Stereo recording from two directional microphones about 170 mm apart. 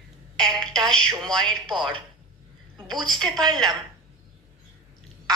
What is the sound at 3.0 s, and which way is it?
Telephone, 5° left (ahead or behind).